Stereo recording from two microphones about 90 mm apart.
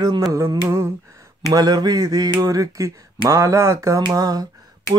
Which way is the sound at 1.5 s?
50° right (ahead or behind).